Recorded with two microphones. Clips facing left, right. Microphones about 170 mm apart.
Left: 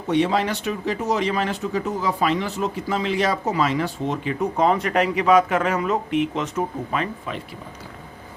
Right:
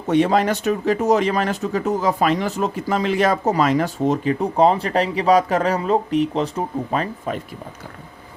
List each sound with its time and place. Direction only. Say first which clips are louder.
0.1 s speech: right 4 dB; 45° right (ahead or behind)